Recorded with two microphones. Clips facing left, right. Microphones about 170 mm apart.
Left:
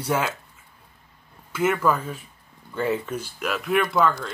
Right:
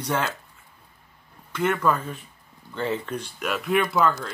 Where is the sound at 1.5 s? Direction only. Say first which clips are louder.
Left 1 dB; 5° left (ahead or behind).